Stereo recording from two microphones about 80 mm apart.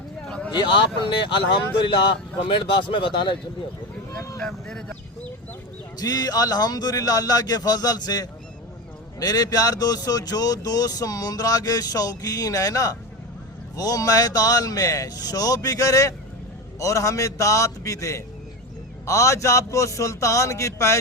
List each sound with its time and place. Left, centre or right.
0.3 s a sound: centre
0.5 s speech: left
2.4 s speech: left
4.4 s speech: centre
6.0 s a man's voice: left